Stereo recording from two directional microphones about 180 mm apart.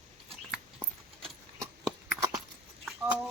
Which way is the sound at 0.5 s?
5° right (ahead or behind).